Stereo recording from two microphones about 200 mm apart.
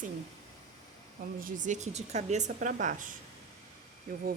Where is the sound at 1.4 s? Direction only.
40° right (ahead or behind).